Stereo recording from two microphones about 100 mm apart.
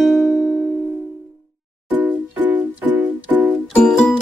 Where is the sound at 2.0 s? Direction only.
15° right (ahead or behind).